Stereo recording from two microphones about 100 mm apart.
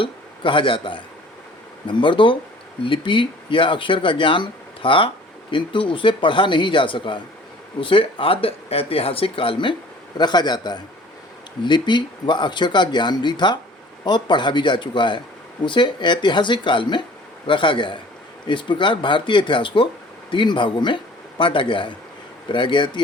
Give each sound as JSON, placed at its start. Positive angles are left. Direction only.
{"t": 0.0, "sound": "speech", "side_deg": 60}
{"t": 10.2, "sound": "speech", "side_deg": 45}